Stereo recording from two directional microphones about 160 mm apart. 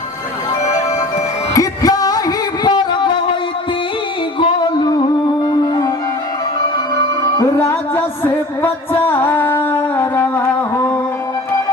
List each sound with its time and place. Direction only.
1.5 s music: 20° left (ahead or behind)
4.4 s music: 30° left (ahead or behind)
7.6 s music: 15° left (ahead or behind)
9.6 s a sound: 15° left (ahead or behind)